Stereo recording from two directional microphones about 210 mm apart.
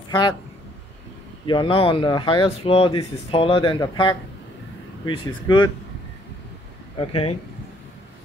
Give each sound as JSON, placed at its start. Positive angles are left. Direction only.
{"t": 1.5, "sound": "speech", "side_deg": 25}
{"t": 7.0, "sound": "speech", "side_deg": 25}